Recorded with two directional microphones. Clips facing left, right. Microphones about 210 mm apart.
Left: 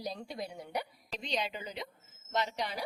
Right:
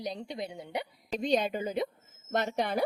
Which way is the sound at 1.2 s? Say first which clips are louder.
Right 9 dB; 50° right (ahead or behind).